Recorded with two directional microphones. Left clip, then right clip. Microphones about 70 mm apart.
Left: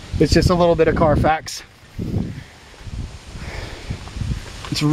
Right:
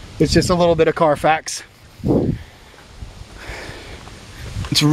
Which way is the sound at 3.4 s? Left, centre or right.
Right.